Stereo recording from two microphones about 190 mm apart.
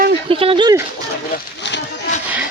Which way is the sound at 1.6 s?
65° left (ahead or behind).